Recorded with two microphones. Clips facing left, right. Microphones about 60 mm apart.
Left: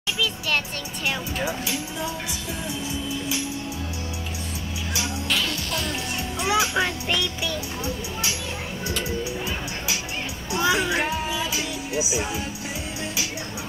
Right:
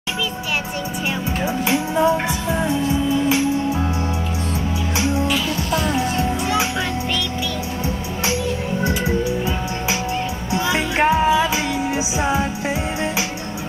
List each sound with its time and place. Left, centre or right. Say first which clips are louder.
1.7 s music: right 12 dB; right
4.9 s music: right 9 dB; right
10.7 s music: right 7 dB; right